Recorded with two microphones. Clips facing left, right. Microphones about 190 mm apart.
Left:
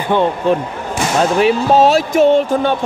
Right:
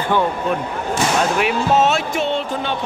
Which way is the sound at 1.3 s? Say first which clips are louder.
Left 5 dB; 30° left (ahead or behind).